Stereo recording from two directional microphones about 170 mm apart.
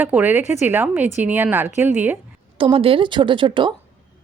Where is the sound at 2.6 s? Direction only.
30° right (ahead or behind).